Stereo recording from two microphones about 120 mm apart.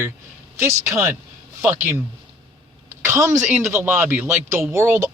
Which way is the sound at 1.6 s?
20° right (ahead or behind).